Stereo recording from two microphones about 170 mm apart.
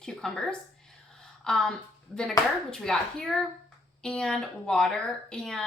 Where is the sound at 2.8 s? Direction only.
5° left (ahead or behind).